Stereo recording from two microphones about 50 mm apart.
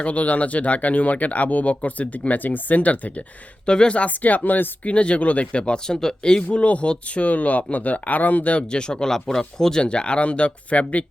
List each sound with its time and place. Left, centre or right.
0.0 s speech: left
4.9 s speech: left
6.5 s speech: left; by 9.8 s centre
9.8 s speech: left